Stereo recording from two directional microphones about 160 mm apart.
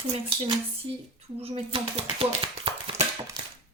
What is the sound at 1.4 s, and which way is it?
Speech, 40° right (ahead or behind).